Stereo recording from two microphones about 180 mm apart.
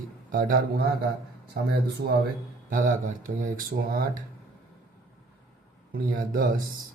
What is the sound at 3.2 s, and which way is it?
Speech, 50° right (ahead or behind).